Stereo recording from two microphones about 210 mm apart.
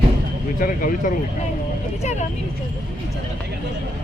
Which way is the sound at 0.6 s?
40° left (ahead or behind).